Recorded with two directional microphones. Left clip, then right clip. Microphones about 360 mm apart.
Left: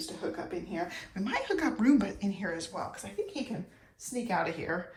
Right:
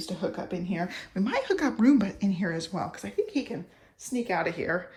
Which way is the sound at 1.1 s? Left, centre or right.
Centre.